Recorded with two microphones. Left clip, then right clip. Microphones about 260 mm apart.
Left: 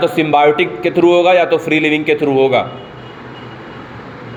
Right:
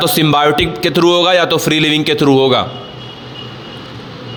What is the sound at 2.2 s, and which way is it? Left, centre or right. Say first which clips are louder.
Speech: right 2 dB; right.